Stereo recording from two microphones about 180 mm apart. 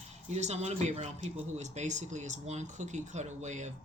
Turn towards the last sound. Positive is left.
turn(degrees=-40)  # may be behind; listen again after turning